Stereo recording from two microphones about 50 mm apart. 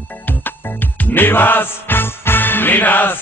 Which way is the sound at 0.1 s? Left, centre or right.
Left.